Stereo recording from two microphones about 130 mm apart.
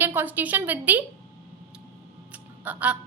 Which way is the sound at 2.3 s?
10° right (ahead or behind).